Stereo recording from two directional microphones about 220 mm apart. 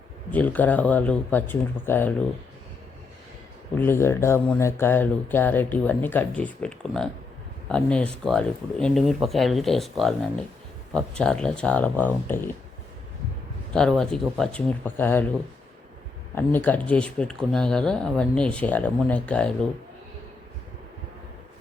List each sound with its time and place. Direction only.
0.3 s speech: 5° left (ahead or behind)
3.8 s speech: 10° left (ahead or behind)
13.7 s speech: 5° left (ahead or behind)
16.3 s speech: 10° left (ahead or behind)